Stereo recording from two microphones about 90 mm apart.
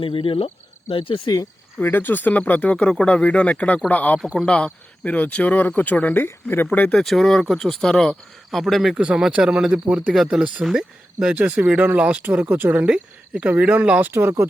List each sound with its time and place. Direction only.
0.0 s speech: 90° left
1.8 s speech: 20° left (ahead or behind)
6.9 s speech: 5° left (ahead or behind); by 14.1 s 15° right (ahead or behind)
14.1 s speech: 30° right (ahead or behind)